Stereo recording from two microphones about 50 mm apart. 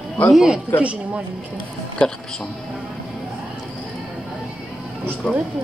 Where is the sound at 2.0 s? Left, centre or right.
Centre.